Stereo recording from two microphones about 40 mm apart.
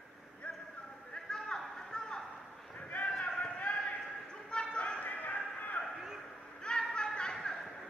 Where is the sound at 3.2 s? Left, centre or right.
Left.